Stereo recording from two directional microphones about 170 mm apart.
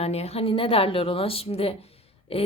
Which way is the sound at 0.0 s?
40° left (ahead or behind).